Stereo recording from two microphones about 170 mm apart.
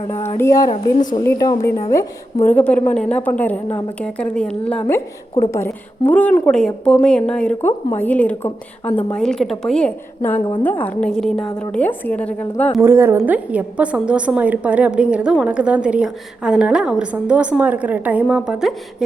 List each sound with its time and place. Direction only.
0.1 s a woman's voice: 15° left (ahead or behind)
12.8 s a woman's voice: 15° right (ahead or behind)